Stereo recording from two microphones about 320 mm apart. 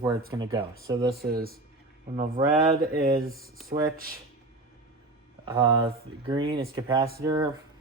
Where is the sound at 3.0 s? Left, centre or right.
Right.